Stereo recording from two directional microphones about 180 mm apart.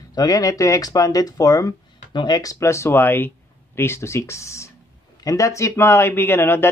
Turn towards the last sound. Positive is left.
turn(degrees=10)  # may be behind; listen again after turning